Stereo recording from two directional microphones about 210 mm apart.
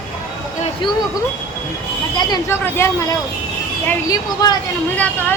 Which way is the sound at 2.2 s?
15° left (ahead or behind).